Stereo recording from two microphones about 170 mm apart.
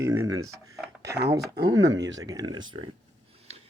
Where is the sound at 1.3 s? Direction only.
75° right (ahead or behind).